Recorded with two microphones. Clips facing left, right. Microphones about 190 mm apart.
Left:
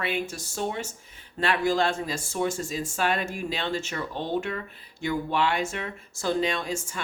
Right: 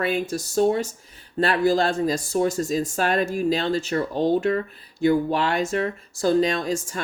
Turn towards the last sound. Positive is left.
turn(degrees=-40)  # may be behind; listen again after turning